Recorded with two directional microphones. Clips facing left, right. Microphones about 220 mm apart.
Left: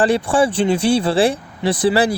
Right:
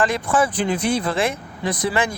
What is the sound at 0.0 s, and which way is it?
Speech, 30° left (ahead or behind).